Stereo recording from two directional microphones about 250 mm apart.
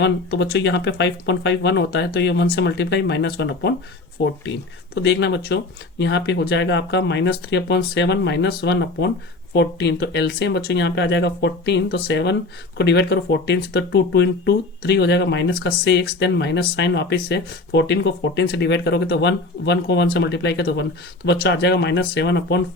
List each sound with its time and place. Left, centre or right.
0.0 s speech: left
4.9 s speech: left